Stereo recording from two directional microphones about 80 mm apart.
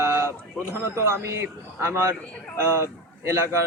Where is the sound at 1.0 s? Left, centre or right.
Right.